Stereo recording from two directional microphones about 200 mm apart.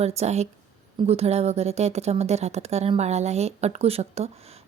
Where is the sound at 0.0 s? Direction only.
35° right (ahead or behind).